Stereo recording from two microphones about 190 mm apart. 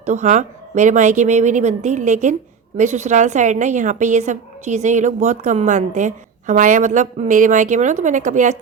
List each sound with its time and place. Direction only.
0.0 s a woman's voice: 40° right (ahead or behind)